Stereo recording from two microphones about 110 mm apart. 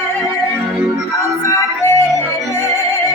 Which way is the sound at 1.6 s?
25° left (ahead or behind).